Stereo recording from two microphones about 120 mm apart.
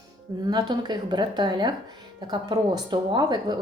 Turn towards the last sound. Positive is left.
turn(degrees=-35)  # may be behind; listen again after turning